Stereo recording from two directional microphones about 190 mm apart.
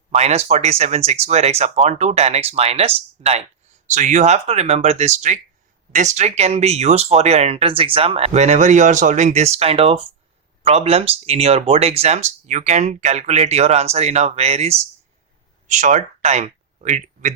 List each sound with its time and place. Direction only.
0.1 s speech: 35° right (ahead or behind)